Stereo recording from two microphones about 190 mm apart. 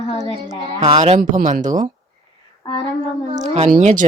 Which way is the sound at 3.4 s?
35° right (ahead or behind).